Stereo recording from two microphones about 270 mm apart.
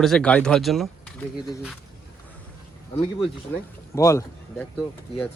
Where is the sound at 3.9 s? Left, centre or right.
Centre.